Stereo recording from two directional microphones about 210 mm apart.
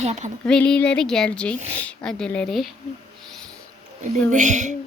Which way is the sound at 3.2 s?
Centre (ahead or behind).